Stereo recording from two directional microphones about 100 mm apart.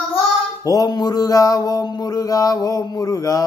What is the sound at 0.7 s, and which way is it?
Mantra, 40° left (ahead or behind).